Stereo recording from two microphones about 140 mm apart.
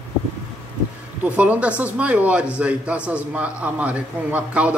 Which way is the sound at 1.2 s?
10° right (ahead or behind).